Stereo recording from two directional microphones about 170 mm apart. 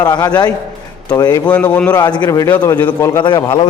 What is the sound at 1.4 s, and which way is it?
Speech, 10° left (ahead or behind).